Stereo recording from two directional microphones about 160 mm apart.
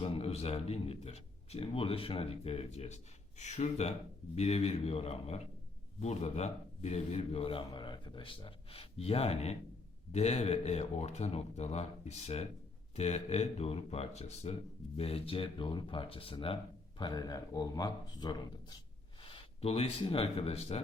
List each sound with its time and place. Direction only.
0.0 s a man's voice: 40° left (ahead or behind)
17.0 s speech: 25° left (ahead or behind)
19.2 s speech: 35° left (ahead or behind)